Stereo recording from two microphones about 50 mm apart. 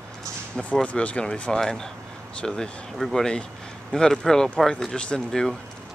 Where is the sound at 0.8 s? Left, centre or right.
Left.